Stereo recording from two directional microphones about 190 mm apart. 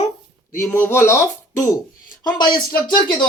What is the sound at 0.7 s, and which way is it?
Speech, 10° left (ahead or behind).